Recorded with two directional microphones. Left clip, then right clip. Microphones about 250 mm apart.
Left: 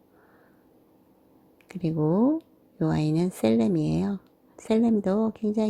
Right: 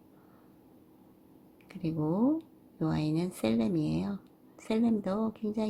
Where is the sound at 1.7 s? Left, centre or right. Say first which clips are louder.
Left 7 dB; left.